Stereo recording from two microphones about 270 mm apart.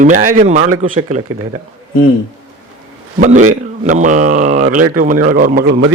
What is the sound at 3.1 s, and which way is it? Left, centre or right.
A man's voice, right.